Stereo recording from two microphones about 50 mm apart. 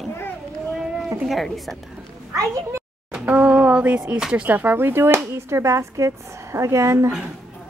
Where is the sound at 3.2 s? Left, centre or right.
Right.